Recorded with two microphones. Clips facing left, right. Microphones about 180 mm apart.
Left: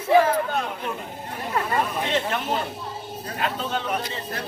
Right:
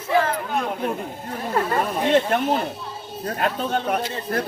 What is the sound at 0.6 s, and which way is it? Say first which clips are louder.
Speech: right 5 dB; 45° right (ahead or behind).